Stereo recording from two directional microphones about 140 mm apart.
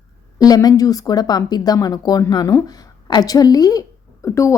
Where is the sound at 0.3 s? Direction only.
25° left (ahead or behind).